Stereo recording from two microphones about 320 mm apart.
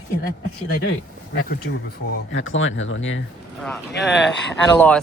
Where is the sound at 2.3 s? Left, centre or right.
Left.